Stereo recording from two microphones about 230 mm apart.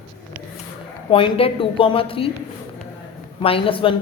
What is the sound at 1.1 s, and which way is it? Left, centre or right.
A woman's voice, left.